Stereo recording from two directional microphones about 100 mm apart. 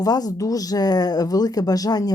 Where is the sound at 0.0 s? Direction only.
40° left (ahead or behind).